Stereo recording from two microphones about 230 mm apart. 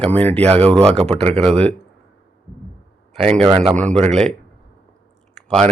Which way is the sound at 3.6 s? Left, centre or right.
Centre.